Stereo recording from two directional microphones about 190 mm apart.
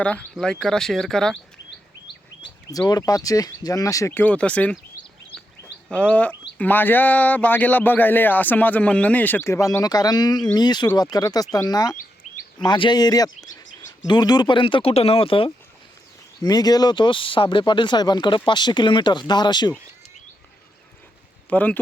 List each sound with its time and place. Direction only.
0.0 s speech: 5° left (ahead or behind)
2.4 s speech: 20° left (ahead or behind)
5.9 s speech: 5° left (ahead or behind); by 19.7 s 25° left (ahead or behind)
21.5 s speech: 10° left (ahead or behind)